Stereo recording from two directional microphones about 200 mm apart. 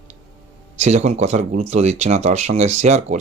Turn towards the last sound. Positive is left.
turn(degrees=-35)  # may be behind; listen again after turning